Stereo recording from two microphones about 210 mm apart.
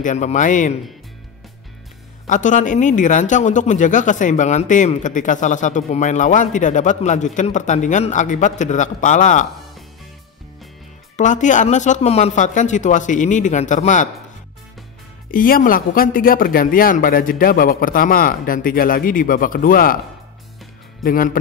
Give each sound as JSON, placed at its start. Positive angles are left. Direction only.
{"t": 0.0, "sound": "speech", "side_deg": 35}
{"t": 2.2, "sound": "speech", "side_deg": 35}
{"t": 11.1, "sound": "speech", "side_deg": 35}
{"t": 15.3, "sound": "speech", "side_deg": 40}
{"t": 21.0, "sound": "speech", "side_deg": 40}